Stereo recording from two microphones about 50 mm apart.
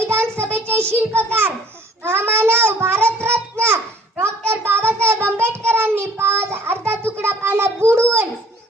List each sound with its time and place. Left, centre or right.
0.1 s child singing: right
0.9 s a child's voice: right
3.1 s child singing: right
3.5 s babbling: right
4.2 s a sound: right
5.2 s child singing: right